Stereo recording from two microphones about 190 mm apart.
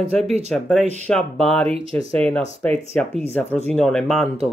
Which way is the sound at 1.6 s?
30° right (ahead or behind).